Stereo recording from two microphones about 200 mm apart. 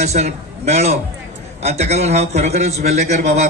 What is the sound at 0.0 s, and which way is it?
A man's voice, 35° right (ahead or behind).